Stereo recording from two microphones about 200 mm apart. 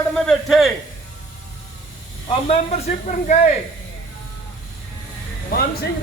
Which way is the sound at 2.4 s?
30° left (ahead or behind).